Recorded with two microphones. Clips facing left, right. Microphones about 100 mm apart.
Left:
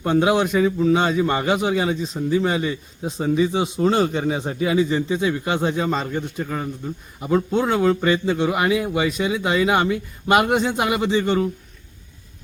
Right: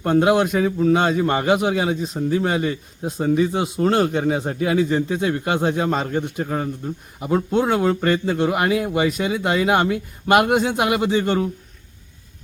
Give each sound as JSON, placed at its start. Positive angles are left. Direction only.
{"t": 0.0, "sound": "a man's voice", "side_deg": 0}
{"t": 6.2, "sound": "a man's voice", "side_deg": -60}
{"t": 6.5, "sound": "a man's voice", "side_deg": -5}